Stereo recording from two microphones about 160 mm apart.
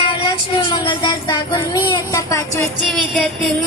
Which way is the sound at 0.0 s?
30° left (ahead or behind).